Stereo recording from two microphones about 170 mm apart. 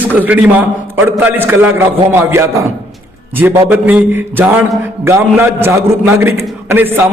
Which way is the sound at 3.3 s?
10° right (ahead or behind).